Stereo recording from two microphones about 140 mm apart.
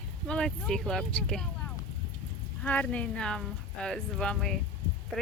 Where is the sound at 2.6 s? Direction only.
10° left (ahead or behind).